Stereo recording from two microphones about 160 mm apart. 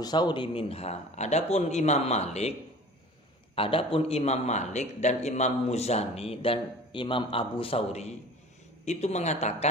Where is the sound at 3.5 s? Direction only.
35° left (ahead or behind).